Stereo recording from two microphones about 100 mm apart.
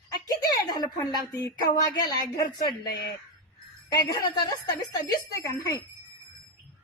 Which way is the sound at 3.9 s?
40° left (ahead or behind).